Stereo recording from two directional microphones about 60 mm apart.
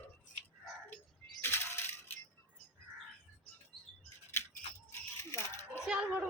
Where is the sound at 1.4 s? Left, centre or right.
Left.